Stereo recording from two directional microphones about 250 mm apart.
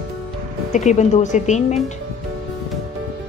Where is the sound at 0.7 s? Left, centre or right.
Left.